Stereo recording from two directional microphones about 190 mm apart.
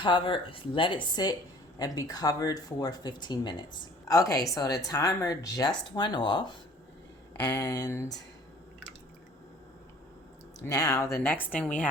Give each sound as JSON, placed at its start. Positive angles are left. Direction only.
{"t": 0.0, "sound": "a woman's voice", "side_deg": 25}
{"t": 10.6, "sound": "speech", "side_deg": 15}